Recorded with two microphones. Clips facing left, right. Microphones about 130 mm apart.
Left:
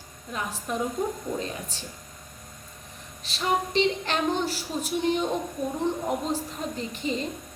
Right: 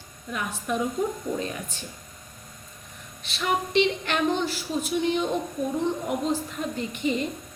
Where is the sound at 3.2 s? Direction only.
35° left (ahead or behind).